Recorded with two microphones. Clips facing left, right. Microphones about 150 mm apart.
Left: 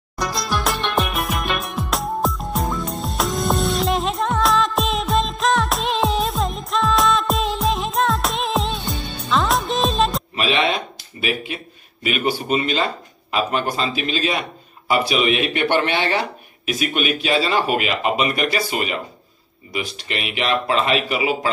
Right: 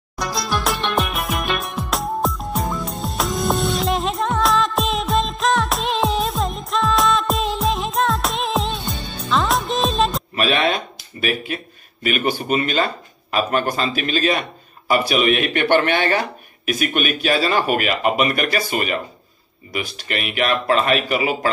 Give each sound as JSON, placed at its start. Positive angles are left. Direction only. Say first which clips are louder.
{"t": 0.2, "sound": "music", "louder": "even", "side_deg": 0}
{"t": 10.4, "sound": "a sound", "louder": "right 1 dB", "side_deg": -50}
{"t": 13.3, "sound": "speech", "louder": "right 1 dB", "side_deg": -50}
{"t": 20.2, "sound": "speech", "louder": "right 2 dB", "side_deg": -50}